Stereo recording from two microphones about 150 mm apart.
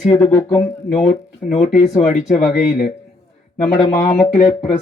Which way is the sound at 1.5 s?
50° left (ahead or behind).